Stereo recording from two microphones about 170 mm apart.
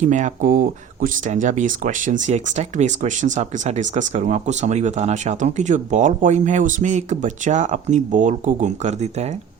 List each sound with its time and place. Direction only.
0.0 s speech: 45° right (ahead or behind)